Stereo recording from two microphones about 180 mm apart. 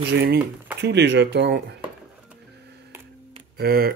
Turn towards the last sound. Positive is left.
turn(degrees=-60)  # may be behind; listen again after turning